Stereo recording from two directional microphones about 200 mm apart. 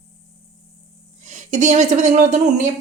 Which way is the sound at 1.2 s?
35° right (ahead or behind).